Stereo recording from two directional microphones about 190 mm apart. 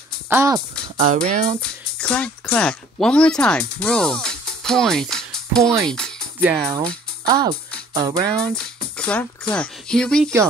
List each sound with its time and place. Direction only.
0.3 s speech: 15° right (ahead or behind)
0.9 s speech: 35° right (ahead or behind)
1.6 s speech: 5° left (ahead or behind)
5.9 s music: 5° left (ahead or behind)
6.4 s speech: 10° right (ahead or behind)
7.2 s speech: 20° right (ahead or behind)
8.4 s speech: 5° left (ahead or behind)